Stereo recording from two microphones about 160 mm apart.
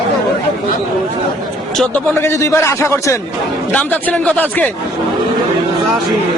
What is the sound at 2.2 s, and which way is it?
Speech, 15° left (ahead or behind).